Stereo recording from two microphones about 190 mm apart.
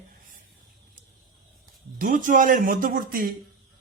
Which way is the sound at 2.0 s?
45° right (ahead or behind).